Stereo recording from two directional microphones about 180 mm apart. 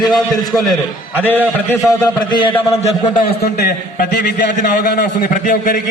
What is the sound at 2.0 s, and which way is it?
A man's voice, 25° left (ahead or behind).